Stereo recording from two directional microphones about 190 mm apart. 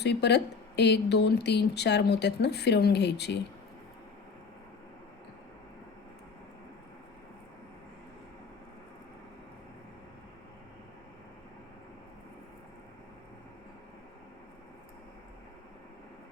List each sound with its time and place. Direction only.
0.0 s speech: 65° left (ahead or behind)